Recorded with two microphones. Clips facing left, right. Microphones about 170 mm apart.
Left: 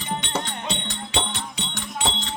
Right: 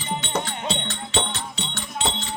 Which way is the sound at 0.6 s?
15° left (ahead or behind).